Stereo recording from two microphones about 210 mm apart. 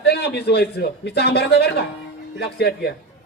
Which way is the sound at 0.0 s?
50° left (ahead or behind).